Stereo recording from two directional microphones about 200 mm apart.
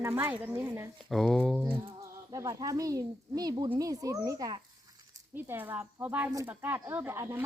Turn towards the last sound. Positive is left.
turn(degrees=-10)  # may be behind; listen again after turning